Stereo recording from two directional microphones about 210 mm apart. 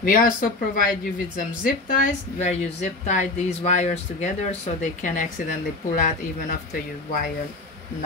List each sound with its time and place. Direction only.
0.0 s speech: 40° left (ahead or behind)